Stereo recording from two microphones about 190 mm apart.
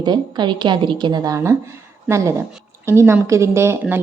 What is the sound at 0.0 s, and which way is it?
A woman's voice, 25° right (ahead or behind).